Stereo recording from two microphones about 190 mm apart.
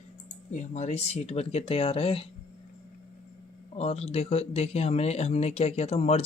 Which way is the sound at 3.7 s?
35° left (ahead or behind).